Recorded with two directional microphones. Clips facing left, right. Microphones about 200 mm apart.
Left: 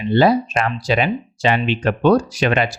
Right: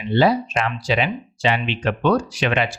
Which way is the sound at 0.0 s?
45° left (ahead or behind).